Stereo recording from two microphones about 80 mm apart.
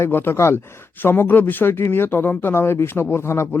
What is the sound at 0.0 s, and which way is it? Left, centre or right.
Speech, left.